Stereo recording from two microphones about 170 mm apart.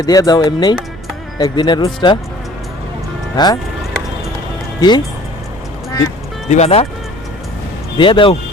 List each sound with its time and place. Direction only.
0.0 s speech: 20° left (ahead or behind)
3.3 s speech: 25° left (ahead or behind)
4.8 s speech: 25° left (ahead or behind)
6.5 s speech: 40° left (ahead or behind)
7.9 s speech: 30° left (ahead or behind)